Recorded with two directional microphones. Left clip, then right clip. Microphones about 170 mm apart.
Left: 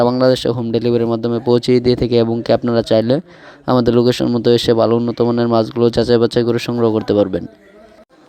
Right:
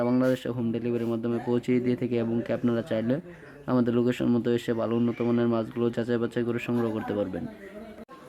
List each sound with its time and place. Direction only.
0.2 s speech: 45° left (ahead or behind)